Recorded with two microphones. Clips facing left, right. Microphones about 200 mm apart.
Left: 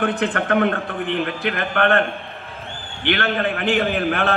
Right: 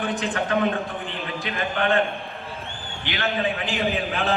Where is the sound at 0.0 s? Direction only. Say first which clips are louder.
Left 4 dB; 60° left (ahead or behind).